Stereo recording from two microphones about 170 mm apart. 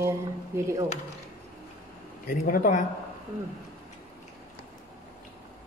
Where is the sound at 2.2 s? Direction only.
50° left (ahead or behind).